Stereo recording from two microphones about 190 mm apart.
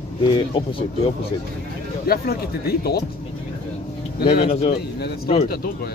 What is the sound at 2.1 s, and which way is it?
Speech, 55° left (ahead or behind).